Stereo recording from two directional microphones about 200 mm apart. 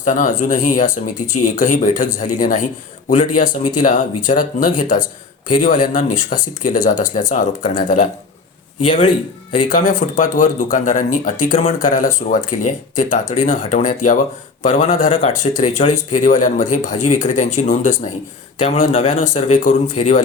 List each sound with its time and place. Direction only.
0.0 s speech: 40° left (ahead or behind)
9.6 s speech: 40° left (ahead or behind)